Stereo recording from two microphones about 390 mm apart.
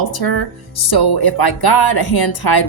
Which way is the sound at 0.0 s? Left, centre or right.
Left.